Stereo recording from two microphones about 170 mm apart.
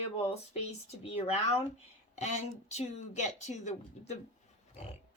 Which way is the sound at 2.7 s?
40° left (ahead or behind).